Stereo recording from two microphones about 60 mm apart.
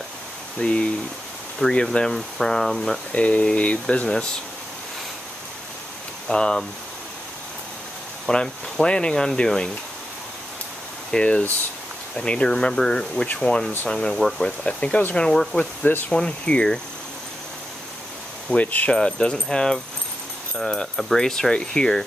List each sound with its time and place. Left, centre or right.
0.6 s speech: centre
2.1 s speech: centre
3.1 s speech: left
6.2 s speech: centre
8.3 s speech: centre
11.1 s speech: centre
14.6 s speech: left
15.1 s speech: centre
15.8 s speech: left
16.1 s speech: centre
18.6 s speech: left
18.9 s speech: centre